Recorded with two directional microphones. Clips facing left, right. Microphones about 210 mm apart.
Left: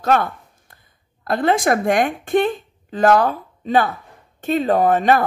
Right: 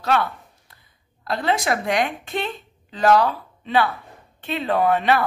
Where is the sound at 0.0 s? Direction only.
45° left (ahead or behind).